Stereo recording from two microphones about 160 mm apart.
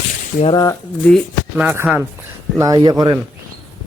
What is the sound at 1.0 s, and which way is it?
Speech, 5° left (ahead or behind).